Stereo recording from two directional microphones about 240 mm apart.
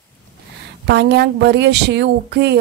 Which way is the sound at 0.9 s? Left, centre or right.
Right.